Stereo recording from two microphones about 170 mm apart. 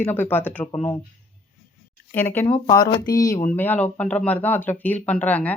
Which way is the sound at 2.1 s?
10° left (ahead or behind).